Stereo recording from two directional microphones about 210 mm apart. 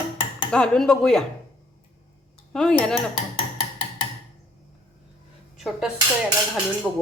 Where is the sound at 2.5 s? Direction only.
Centre (ahead or behind).